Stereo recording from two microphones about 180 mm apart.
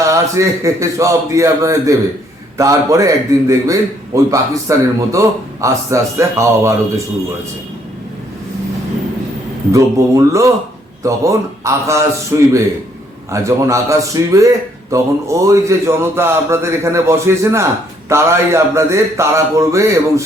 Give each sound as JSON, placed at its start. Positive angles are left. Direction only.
{"t": 0.0, "sound": "a man's voice", "side_deg": -15}
{"t": 9.7, "sound": "a man's voice", "side_deg": -15}